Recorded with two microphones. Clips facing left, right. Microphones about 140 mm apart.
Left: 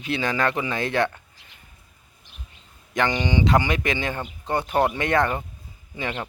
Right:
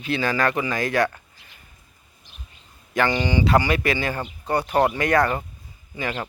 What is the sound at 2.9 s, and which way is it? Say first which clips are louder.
Speech: right 1 dB; 20° left (ahead or behind).